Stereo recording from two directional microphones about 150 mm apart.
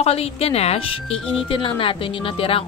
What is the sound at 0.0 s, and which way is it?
Speech, 40° left (ahead or behind).